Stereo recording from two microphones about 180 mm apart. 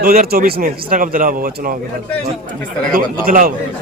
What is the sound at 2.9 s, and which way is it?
Speech, 50° right (ahead or behind).